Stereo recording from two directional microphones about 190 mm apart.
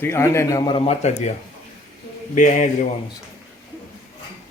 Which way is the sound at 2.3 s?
40° left (ahead or behind).